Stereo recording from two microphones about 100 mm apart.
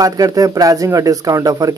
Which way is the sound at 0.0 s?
35° right (ahead or behind).